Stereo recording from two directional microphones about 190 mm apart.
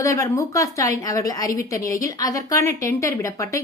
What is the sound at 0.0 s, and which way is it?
A woman's voice, 15° left (ahead or behind).